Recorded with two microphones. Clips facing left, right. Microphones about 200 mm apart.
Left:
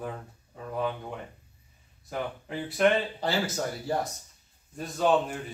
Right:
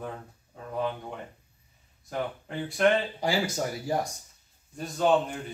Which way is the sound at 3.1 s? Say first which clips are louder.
Right 1 dB; 10° right (ahead or behind).